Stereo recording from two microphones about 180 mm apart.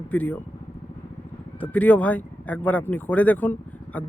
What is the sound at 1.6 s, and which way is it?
Speech, 10° left (ahead or behind).